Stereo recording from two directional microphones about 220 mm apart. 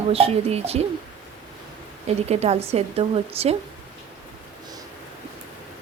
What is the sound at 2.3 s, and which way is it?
Speech, 30° right (ahead or behind).